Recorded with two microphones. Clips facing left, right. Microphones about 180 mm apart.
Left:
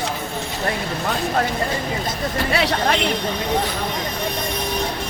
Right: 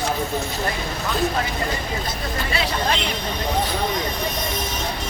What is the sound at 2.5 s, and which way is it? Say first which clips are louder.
Speech: left 3 dB; 70° left (ahead or behind).